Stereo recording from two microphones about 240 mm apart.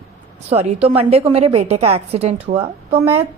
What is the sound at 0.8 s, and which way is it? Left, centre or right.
A woman's voice, right.